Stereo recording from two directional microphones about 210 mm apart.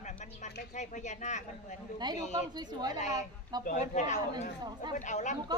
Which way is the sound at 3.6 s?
40° left (ahead or behind).